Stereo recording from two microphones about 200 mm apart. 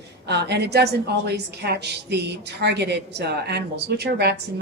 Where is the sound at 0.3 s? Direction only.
55° right (ahead or behind).